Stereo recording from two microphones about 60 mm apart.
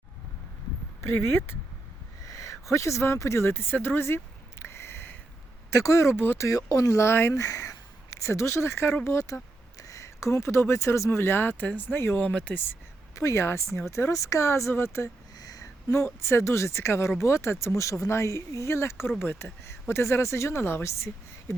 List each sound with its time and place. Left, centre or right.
1.0 s speech: left
2.2 s a sound: left
2.7 s speech: left
4.6 s a sound: left
5.7 s speech: left
6.4 s speech: left
7.3 s speech: left
11.9 s speech: left
12.2 s speech: left
13.1 s a woman's voice: left
13.4 s speech: left
13.9 s speech: left
15.4 s a sound: left
16.2 s a woman's voice: left